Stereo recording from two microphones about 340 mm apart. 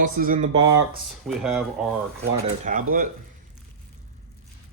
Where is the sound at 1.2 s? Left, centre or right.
Centre.